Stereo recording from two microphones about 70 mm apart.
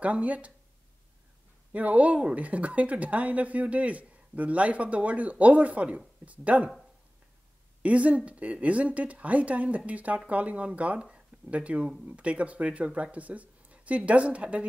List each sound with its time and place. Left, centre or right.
0.0 s speech: centre
1.7 s speech: right
7.8 s speech: centre